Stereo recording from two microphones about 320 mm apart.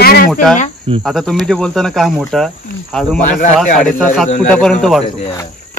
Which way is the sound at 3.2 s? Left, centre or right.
Left.